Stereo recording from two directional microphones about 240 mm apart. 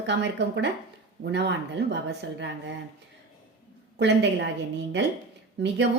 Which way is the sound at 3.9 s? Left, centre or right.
Right.